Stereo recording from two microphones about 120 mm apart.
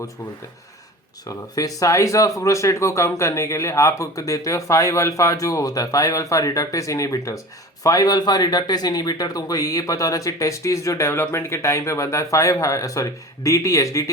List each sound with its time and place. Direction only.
1.3 s speech: 30° left (ahead or behind)